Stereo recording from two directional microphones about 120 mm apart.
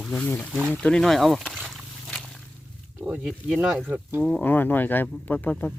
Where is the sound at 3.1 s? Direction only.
10° right (ahead or behind).